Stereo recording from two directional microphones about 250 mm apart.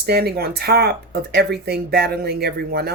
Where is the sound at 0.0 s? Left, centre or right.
Right.